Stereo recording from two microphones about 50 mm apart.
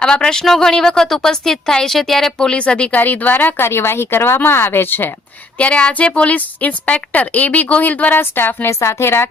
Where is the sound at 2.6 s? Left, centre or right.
Left.